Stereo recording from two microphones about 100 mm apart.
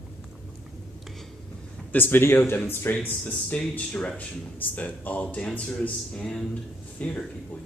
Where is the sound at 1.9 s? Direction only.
20° left (ahead or behind).